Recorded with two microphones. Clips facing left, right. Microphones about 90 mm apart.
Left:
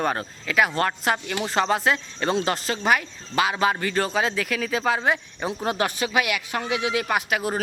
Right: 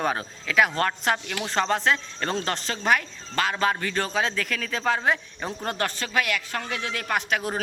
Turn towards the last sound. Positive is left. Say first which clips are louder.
# left 2 dB
turn(degrees=5)  # may be behind; listen again after turning